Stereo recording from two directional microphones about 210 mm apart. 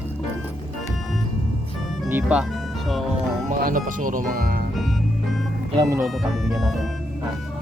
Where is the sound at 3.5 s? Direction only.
40° right (ahead or behind).